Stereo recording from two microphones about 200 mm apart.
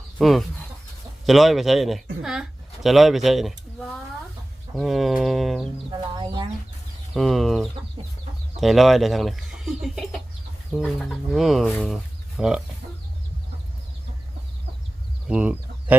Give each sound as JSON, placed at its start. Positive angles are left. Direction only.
{"t": 0.2, "sound": "speech", "side_deg": 0}
{"t": 5.9, "sound": "speech", "side_deg": -20}
{"t": 7.1, "sound": "speech", "side_deg": 0}
{"t": 15.3, "sound": "a sound", "side_deg": -5}